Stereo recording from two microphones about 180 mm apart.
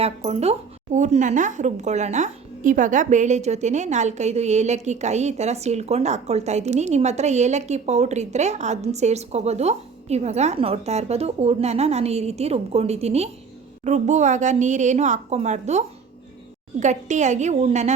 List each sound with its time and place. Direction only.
0.0 s a woman's voice: 35° right (ahead or behind)
16.8 s a woman's voice: 40° right (ahead or behind)